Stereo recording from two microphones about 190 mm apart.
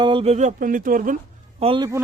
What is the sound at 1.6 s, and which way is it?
Speech, 25° right (ahead or behind).